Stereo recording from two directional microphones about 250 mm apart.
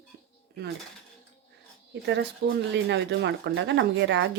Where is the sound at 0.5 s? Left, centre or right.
Right.